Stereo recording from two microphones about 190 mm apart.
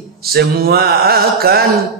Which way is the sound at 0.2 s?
55° right (ahead or behind).